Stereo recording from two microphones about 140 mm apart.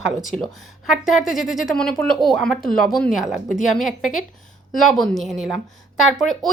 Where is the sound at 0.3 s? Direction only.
Centre (ahead or behind).